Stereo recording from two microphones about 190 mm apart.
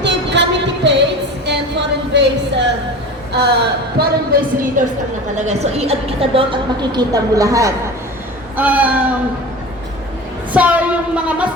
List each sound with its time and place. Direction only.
0.0 s music: 65° right (ahead or behind)
3.3 s a woman's voice: 60° right (ahead or behind)
5.4 s a woman's voice: 35° right (ahead or behind); by 9.1 s 10° right (ahead or behind)
10.5 s a sound: 10° right (ahead or behind)